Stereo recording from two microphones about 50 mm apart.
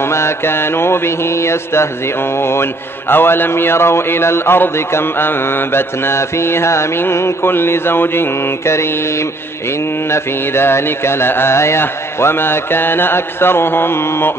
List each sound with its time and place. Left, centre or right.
0.0 s mantra: left
11.8 s mantra: left